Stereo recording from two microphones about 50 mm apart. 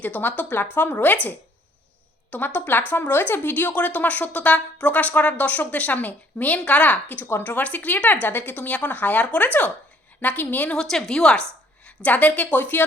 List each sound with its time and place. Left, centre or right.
0.0 s speech: left
2.3 s speech: left
10.7 s a woman's voice: centre
11.9 s speech: left